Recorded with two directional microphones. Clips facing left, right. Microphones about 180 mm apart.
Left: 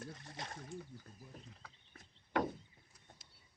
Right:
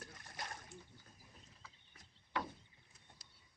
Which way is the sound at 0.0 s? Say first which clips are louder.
Left 3 dB; 25° left (ahead or behind).